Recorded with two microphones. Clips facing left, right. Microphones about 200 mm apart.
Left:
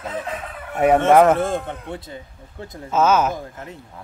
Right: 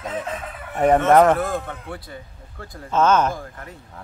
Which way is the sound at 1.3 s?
25° left (ahead or behind).